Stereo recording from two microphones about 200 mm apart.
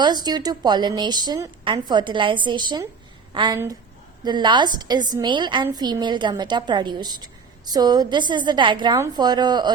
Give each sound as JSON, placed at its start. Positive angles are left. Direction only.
{"t": 0.0, "sound": "a woman's voice", "side_deg": -20}